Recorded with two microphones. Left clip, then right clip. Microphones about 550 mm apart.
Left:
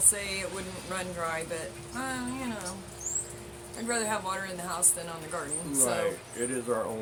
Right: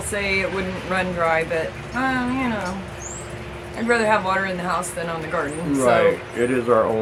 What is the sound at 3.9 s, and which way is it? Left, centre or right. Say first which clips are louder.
Speech: right 13 dB; left.